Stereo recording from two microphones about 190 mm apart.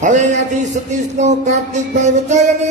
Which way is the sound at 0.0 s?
40° right (ahead or behind).